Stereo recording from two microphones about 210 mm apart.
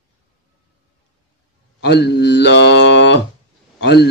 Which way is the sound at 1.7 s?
50° left (ahead or behind).